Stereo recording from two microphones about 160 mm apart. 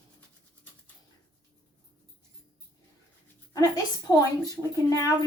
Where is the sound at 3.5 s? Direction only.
20° left (ahead or behind).